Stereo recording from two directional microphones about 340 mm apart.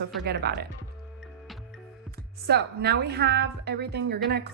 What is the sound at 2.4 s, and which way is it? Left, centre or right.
A woman's voice, right.